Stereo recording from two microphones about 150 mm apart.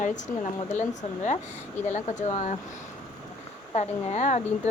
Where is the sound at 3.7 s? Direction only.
45° left (ahead or behind).